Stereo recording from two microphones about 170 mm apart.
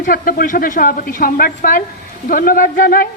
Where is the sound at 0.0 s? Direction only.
55° left (ahead or behind).